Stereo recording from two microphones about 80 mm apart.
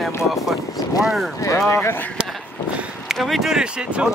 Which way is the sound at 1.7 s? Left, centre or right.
Left.